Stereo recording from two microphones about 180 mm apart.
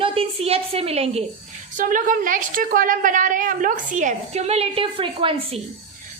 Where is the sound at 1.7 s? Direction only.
50° right (ahead or behind); by 5.6 s 30° right (ahead or behind).